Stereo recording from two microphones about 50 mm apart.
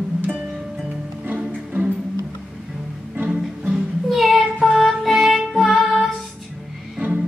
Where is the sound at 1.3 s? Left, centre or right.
Right.